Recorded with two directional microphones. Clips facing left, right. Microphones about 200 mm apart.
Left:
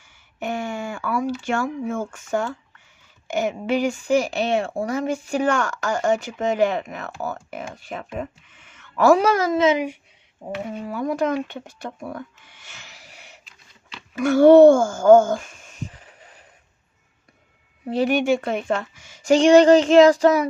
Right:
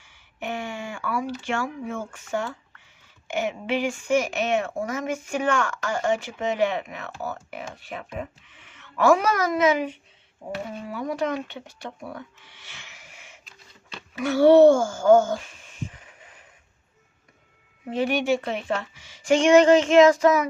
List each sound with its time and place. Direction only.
0.0 s a sound: 45° left (ahead or behind)
1.5 s a woman's voice: 45° left (ahead or behind); by 10.6 s 20° left (ahead or behind)
10.9 s speech: 45° left (ahead or behind)
14.2 s speech: 50° left (ahead or behind)
17.8 s a woman's voice: 35° left (ahead or behind)